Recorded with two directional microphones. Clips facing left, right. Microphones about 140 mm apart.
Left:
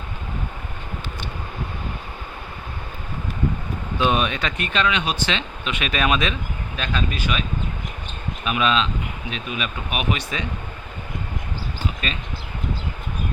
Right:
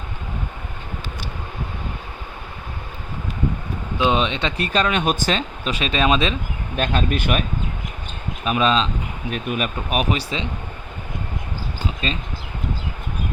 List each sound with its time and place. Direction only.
3.9 s speech: 20° right (ahead or behind)
6.7 s speech: 50° right (ahead or behind)
8.4 s speech: 35° right (ahead or behind)
9.3 s speech: 50° right (ahead or behind); by 10.5 s 30° right (ahead or behind)
12.0 s speech: 30° right (ahead or behind)